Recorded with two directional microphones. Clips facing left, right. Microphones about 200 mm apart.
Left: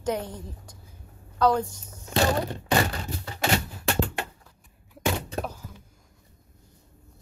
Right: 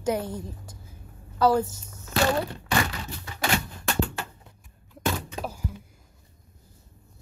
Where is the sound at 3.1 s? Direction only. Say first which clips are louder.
Left 4 dB; 35° left (ahead or behind).